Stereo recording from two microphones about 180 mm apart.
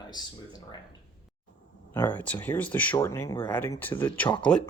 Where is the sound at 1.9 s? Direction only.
10° left (ahead or behind).